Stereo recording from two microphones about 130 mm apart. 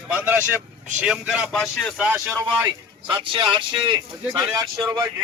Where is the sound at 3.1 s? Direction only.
40° right (ahead or behind).